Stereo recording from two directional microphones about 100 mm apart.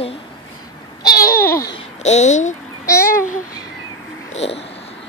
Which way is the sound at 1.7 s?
90° left.